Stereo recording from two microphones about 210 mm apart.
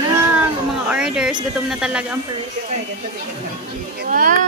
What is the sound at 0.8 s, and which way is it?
Speech, 5° right (ahead or behind).